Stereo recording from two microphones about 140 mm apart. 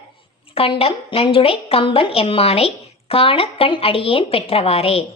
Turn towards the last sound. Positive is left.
turn(degrees=45)  # may be behind; listen again after turning